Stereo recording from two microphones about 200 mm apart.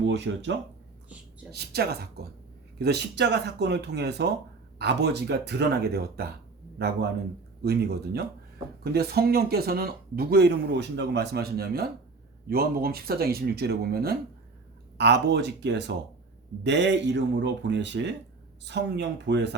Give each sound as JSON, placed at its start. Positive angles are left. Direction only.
{"t": 0.0, "sound": "speech", "side_deg": -60}
{"t": 1.5, "sound": "speech", "side_deg": -55}